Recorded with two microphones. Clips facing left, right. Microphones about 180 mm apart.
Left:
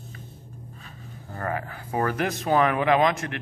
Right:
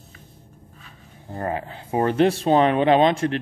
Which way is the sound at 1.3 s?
25° right (ahead or behind).